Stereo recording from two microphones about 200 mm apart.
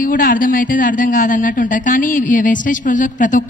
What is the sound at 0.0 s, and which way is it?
Speech, 45° left (ahead or behind).